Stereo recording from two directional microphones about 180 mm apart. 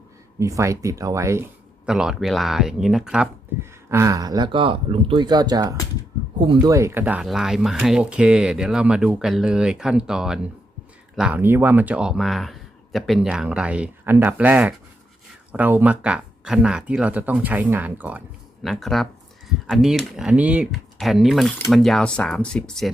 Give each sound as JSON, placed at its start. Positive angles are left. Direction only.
{"t": 0.3, "sound": "speech", "side_deg": -15}
{"t": 1.9, "sound": "speech", "side_deg": -5}
{"t": 3.6, "sound": "speech", "side_deg": -15}